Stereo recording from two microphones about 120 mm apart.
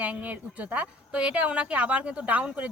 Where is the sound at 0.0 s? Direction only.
15° right (ahead or behind).